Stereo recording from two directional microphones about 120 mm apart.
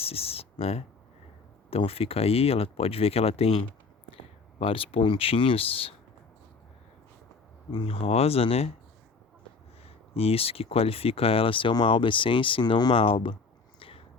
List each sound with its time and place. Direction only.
0.0 s speech: 55° left (ahead or behind)
7.7 s speech: 50° left (ahead or behind)
10.2 s speech: 55° left (ahead or behind)
13.7 s a sound: 50° left (ahead or behind)